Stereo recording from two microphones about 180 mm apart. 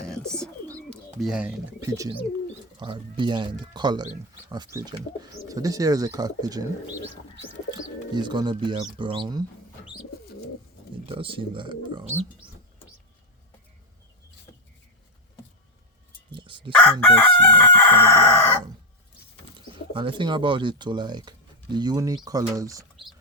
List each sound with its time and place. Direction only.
0.0 s bird: 5° left (ahead or behind)
1.9 s speech: 20° right (ahead or behind)
7.7 s speech: 25° right (ahead or behind)
11.1 s speech: 30° right (ahead or behind)
14.5 s vehicle: 20° left (ahead or behind)
16.3 s speech: 25° right (ahead or behind)
16.7 s crowing: 10° left (ahead or behind)
19.5 s speech: 30° right (ahead or behind)